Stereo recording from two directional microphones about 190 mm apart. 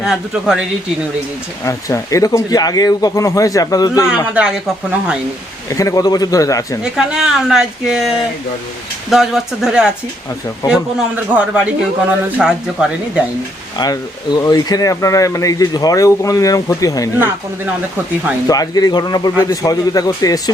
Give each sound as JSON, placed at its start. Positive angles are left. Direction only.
{"t": 0.0, "sound": "speech", "side_deg": -5}
{"t": 1.6, "sound": "speech", "side_deg": 15}
{"t": 4.4, "sound": "speech", "side_deg": -5}
{"t": 5.6, "sound": "speech", "side_deg": 15}
{"t": 6.9, "sound": "speech", "side_deg": 0}
{"t": 13.7, "sound": "speech", "side_deg": 20}
{"t": 17.7, "sound": "speech", "side_deg": -10}
{"t": 18.4, "sound": "a man's voice", "side_deg": 20}